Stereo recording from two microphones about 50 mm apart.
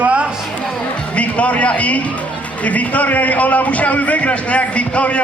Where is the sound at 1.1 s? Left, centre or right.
Left.